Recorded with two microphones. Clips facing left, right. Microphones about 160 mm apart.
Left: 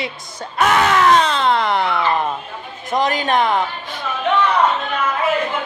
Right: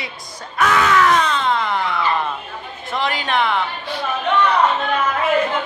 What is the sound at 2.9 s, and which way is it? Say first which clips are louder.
A woman's voice: left 4 dB; 40° left (ahead or behind).